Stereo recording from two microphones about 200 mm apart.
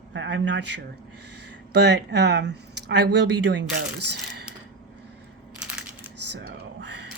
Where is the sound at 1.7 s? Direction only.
55° right (ahead or behind).